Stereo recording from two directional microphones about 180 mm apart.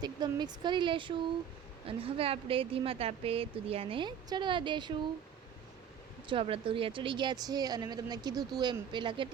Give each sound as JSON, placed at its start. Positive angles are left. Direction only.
{"t": 0.0, "sound": "speech", "side_deg": -25}
{"t": 6.2, "sound": "speech", "side_deg": -30}